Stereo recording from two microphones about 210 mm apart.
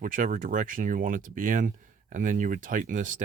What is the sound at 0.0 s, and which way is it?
Speech, 40° right (ahead or behind).